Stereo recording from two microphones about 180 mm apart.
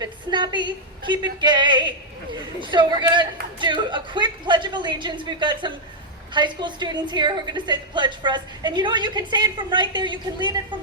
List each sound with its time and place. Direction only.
0.0 s a woman's voice: 25° right (ahead or behind)